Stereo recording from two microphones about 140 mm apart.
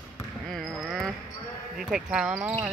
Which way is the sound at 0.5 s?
Centre (ahead or behind).